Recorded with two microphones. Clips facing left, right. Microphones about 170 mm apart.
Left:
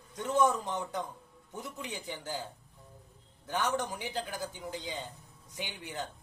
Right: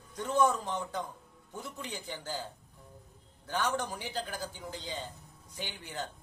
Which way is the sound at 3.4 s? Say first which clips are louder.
Left 1 dB; 20° left (ahead or behind).